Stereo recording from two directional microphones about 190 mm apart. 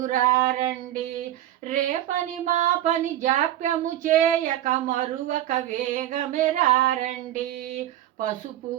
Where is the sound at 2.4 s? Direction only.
40° right (ahead or behind).